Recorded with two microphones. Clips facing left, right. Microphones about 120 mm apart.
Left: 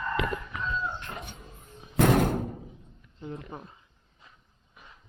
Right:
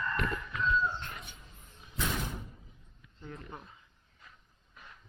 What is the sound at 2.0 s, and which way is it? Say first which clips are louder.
Door: left 14 dB; 60° left (ahead or behind).